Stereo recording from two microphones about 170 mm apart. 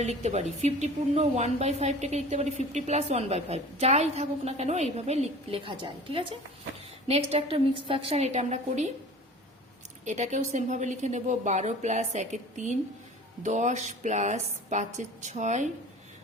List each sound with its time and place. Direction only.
0.0 s a woman's voice: 40° right (ahead or behind)
10.1 s a woman's voice: 45° right (ahead or behind)